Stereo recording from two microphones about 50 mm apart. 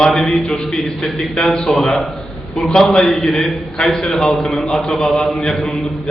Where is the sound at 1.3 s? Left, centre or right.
Centre.